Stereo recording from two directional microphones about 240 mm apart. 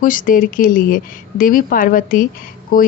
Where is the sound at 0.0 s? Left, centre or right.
Left.